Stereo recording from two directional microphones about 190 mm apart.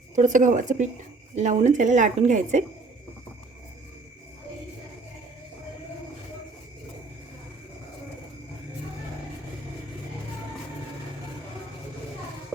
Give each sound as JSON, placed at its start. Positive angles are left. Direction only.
{"t": 0.2, "sound": "a woman's voice", "side_deg": -40}